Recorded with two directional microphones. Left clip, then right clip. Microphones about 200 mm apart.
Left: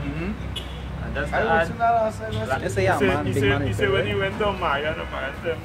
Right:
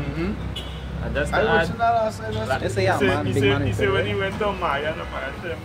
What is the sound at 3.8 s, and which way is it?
Speech, 25° left (ahead or behind).